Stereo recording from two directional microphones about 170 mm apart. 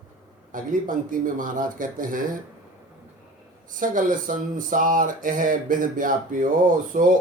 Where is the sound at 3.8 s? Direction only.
50° right (ahead or behind).